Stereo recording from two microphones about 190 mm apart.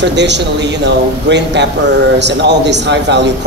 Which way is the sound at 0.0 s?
65° right (ahead or behind).